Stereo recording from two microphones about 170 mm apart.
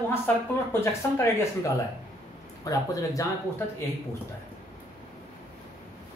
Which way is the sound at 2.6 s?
20° left (ahead or behind).